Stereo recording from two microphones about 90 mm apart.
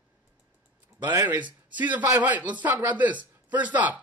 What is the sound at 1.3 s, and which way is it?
A man's voice, 20° right (ahead or behind).